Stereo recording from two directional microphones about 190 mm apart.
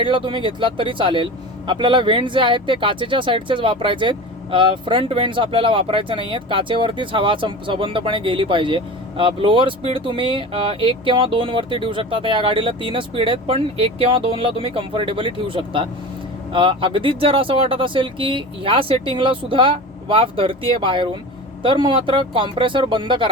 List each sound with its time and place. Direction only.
0.0 s speech: 25° right (ahead or behind)